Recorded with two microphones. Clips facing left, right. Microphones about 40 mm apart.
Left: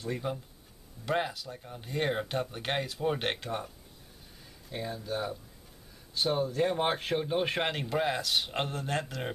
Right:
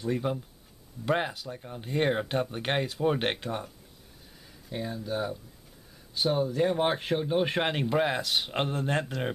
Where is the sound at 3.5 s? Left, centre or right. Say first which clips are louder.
Right 2 dB; centre.